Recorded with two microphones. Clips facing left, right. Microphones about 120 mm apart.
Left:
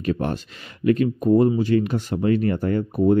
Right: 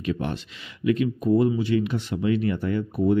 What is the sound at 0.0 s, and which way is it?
Speech, 45° left (ahead or behind).